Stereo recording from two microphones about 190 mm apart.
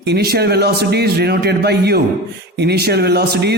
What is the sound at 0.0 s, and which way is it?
A man's voice, 60° right (ahead or behind).